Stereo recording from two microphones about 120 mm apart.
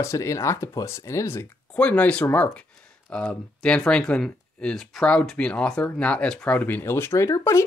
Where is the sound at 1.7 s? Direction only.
10° left (ahead or behind).